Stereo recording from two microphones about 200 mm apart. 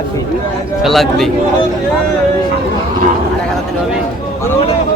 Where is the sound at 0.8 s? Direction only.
Centre (ahead or behind).